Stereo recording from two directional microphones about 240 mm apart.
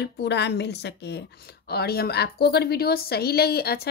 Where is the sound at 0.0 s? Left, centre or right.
Left.